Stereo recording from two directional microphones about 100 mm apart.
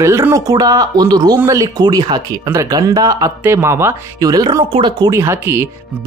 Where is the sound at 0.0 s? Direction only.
30° right (ahead or behind).